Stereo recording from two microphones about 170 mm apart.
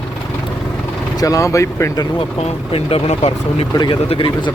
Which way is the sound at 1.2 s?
20° left (ahead or behind).